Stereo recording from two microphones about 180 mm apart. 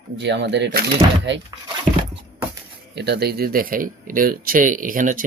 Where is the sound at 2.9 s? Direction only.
65° right (ahead or behind).